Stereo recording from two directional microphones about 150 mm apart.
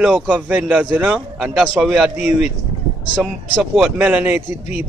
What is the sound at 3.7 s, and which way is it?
A man's voice, 5° right (ahead or behind).